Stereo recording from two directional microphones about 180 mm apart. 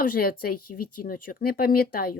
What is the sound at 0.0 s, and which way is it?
Speech, 55° left (ahead or behind).